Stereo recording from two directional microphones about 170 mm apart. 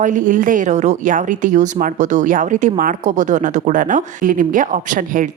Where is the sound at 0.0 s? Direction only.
50° right (ahead or behind).